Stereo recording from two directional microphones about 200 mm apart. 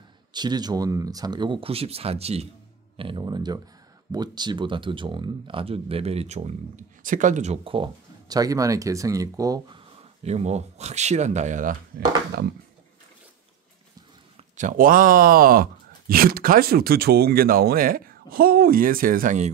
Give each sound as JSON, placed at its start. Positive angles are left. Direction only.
{"t": 0.3, "sound": "speech", "side_deg": -20}
{"t": 10.2, "sound": "speech", "side_deg": -35}
{"t": 14.3, "sound": "speech", "side_deg": -40}